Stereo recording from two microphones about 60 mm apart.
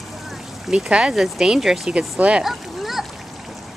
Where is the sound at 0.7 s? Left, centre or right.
Centre.